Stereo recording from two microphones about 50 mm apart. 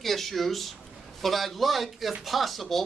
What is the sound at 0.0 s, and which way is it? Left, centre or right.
Speech, centre.